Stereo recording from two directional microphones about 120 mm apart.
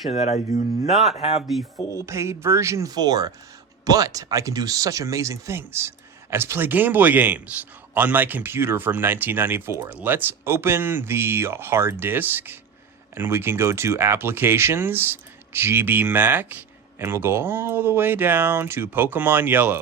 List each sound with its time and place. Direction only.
0.1 s speech: 65° left (ahead or behind)
0.9 s speech: centre (ahead or behind)
1.1 s speech: 60° left (ahead or behind)
1.4 s speech: centre (ahead or behind)
2.0 s a man's voice: 25° right (ahead or behind)